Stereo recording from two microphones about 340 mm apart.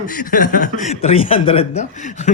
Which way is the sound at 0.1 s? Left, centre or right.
Left.